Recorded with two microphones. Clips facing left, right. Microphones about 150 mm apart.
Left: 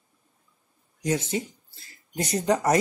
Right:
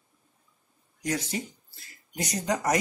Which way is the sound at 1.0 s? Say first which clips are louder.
Left 4 dB; 25° left (ahead or behind).